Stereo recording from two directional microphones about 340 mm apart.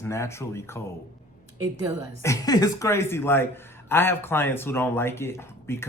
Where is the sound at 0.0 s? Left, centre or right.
Centre.